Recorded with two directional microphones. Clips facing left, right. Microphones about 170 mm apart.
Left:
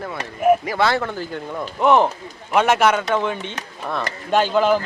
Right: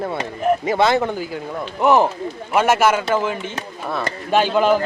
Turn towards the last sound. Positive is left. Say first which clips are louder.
# right 1 dB
turn(degrees=-5)  # may be behind; listen again after turning